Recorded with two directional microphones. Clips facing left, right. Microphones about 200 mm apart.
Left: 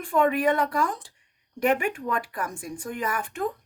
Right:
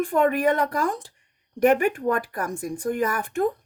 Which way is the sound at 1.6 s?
40° right (ahead or behind).